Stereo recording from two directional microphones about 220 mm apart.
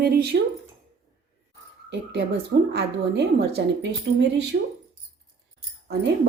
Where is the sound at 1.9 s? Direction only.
50° right (ahead or behind).